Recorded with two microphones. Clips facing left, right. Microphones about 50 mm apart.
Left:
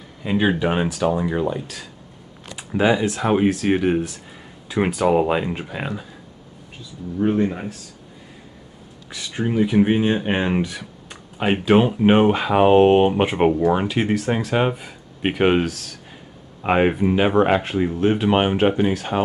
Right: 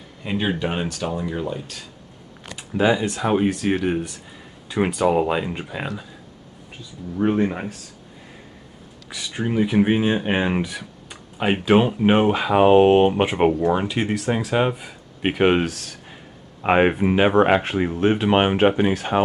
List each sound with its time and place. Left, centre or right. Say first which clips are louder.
0.2 s speech: left 4 dB; centre
2.5 s speech: left 1 dB; centre
9.1 s speech: left 1 dB; centre
11.1 s speech: left 1 dB; centre
13.5 s speech: left 2 dB; centre